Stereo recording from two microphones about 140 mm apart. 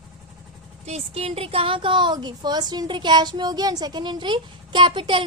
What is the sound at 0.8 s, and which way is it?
A woman's voice, 45° right (ahead or behind).